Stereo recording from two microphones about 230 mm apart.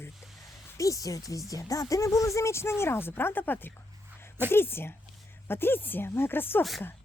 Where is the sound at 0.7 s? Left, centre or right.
Centre.